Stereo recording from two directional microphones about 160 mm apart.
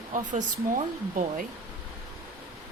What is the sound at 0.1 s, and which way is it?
Speech, 50° right (ahead or behind).